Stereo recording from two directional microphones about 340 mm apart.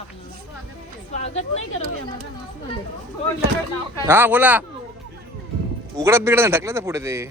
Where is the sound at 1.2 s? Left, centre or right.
Centre.